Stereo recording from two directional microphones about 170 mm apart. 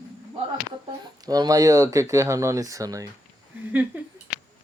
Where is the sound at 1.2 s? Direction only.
20° right (ahead or behind).